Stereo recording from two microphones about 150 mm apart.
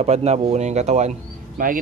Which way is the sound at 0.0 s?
45° right (ahead or behind).